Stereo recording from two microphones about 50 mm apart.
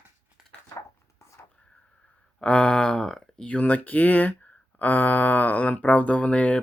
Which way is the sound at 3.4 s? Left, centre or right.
Left.